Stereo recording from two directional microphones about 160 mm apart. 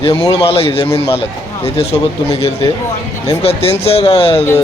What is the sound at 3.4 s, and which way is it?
Speech, 40° left (ahead or behind).